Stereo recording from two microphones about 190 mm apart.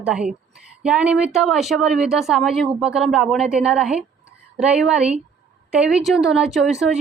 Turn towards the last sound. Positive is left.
turn(degrees=-5)  # may be behind; listen again after turning